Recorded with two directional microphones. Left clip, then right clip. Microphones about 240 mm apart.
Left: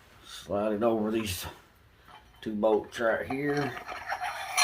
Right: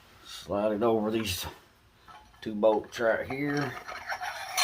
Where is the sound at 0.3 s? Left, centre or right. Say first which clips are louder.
Right 1 dB; right.